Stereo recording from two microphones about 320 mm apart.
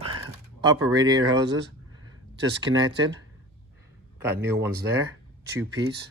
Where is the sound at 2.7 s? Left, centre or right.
Right.